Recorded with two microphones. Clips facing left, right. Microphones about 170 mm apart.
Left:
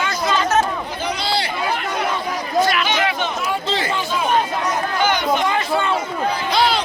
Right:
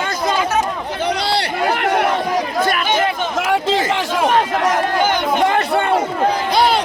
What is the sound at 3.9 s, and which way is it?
Speech, 85° right.